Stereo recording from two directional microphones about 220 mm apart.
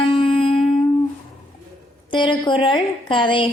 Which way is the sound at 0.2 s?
25° left (ahead or behind).